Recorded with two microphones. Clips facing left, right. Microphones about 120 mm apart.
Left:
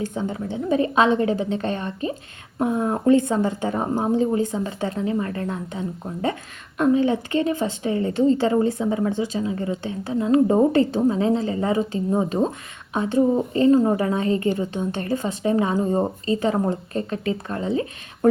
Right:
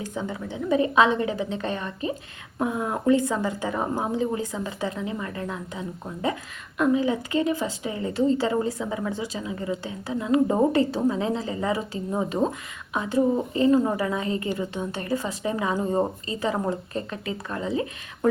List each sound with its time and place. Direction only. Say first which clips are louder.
0.1 s a woman's voice: left 4 dB; 30° left (ahead or behind)